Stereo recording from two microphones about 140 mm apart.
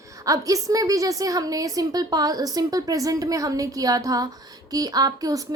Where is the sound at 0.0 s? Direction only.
25° right (ahead or behind).